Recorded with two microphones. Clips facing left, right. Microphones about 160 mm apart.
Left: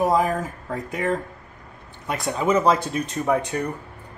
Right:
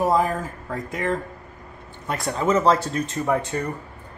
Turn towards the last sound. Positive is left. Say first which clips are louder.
# left 1 dB
turn(degrees=15)  # may be behind; listen again after turning